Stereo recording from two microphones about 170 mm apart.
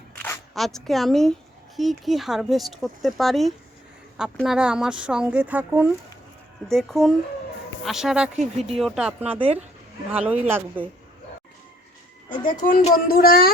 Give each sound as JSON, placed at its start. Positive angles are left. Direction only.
{"t": 0.5, "sound": "a woman's voice", "side_deg": 0}
{"t": 6.7, "sound": "a woman's voice", "side_deg": 0}
{"t": 12.3, "sound": "speech", "side_deg": 50}